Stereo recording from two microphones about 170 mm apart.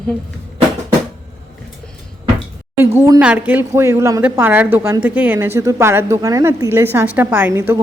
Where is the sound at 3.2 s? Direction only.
10° right (ahead or behind).